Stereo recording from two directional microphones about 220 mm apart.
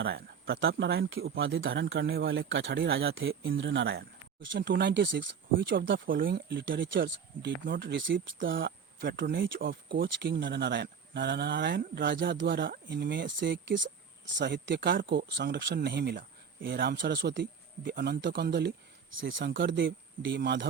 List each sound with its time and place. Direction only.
0.0 s speech: 45° right (ahead or behind)
6.1 s speech: 40° right (ahead or behind)
19.1 s speech: 60° right (ahead or behind)